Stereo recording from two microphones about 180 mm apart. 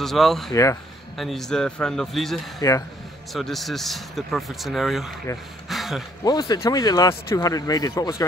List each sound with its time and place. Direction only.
0.0 s speech: centre (ahead or behind)
0.5 s speech: 20° left (ahead or behind)
1.1 s speech: centre (ahead or behind)
5.7 s a sound: centre (ahead or behind)
6.2 s speech: 25° left (ahead or behind)